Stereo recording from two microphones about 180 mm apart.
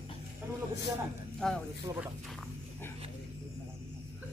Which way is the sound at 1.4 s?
5° left (ahead or behind).